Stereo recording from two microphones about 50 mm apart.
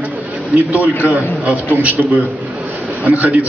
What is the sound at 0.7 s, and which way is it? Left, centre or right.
A man's voice, right.